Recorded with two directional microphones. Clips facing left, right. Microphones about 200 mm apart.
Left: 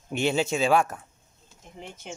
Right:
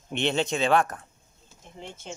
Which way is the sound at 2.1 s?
10° left (ahead or behind).